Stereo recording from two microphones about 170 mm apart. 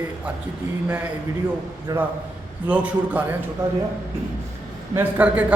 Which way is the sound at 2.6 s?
10° right (ahead or behind).